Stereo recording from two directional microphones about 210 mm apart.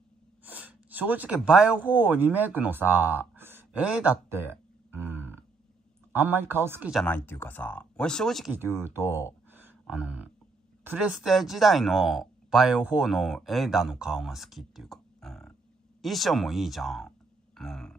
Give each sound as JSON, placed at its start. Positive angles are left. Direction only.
{"t": 0.5, "sound": "speech", "side_deg": -5}
{"t": 8.5, "sound": "speech", "side_deg": -10}
{"t": 17.6, "sound": "a sound", "side_deg": 0}